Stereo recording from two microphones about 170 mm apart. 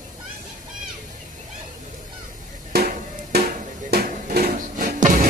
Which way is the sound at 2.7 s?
70° right (ahead or behind).